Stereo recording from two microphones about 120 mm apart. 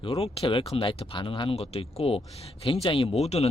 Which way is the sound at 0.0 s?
45° left (ahead or behind).